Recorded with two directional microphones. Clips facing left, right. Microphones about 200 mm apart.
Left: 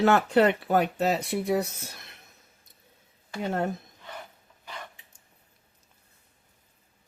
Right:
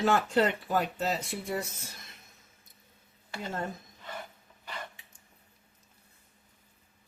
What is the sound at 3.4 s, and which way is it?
Speech, 65° left (ahead or behind).